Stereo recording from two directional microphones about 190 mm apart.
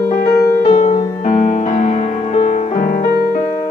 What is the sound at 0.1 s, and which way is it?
Music, 55° left (ahead or behind).